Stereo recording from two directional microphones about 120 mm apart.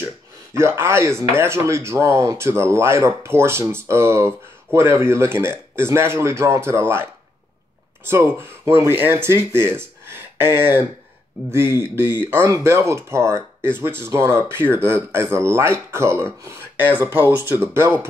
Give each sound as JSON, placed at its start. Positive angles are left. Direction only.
{"t": 0.6, "sound": "speech", "side_deg": -20}
{"t": 8.1, "sound": "speech", "side_deg": -20}